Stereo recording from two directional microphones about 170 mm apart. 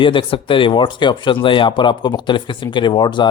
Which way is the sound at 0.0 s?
30° left (ahead or behind).